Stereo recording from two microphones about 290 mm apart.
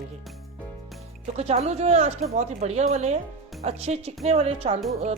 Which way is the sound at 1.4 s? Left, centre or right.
Right.